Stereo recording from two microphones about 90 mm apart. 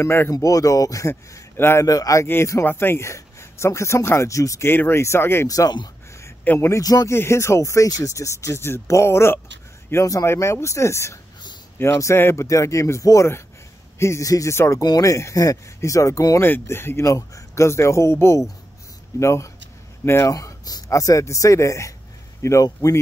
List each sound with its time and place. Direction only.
0.0 s speech: 25° left (ahead or behind)
0.3 s speech: 40° left (ahead or behind)
2.2 s speech: 30° left (ahead or behind)
5.5 s speech: 40° left (ahead or behind)
6.4 s a man's voice: 20° left (ahead or behind)
6.7 s speech: 45° left (ahead or behind)
7.1 s speech: 30° left (ahead or behind)
14.8 s speech: 40° left (ahead or behind)
16.4 s speech: 25° left (ahead or behind)